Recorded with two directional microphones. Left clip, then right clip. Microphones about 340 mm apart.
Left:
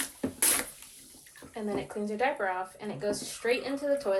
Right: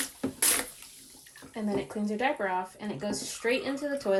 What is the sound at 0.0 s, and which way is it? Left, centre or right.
Water, centre.